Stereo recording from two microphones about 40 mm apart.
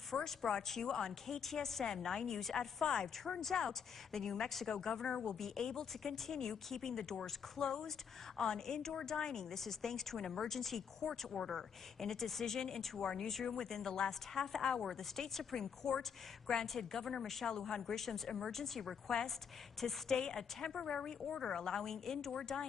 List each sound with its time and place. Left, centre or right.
0.1 s a woman's voice: centre
20.2 s a woman's voice: centre